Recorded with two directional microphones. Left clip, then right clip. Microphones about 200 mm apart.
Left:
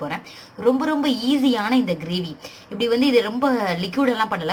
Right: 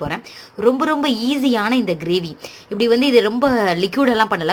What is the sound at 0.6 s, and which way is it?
Speech, 40° right (ahead or behind).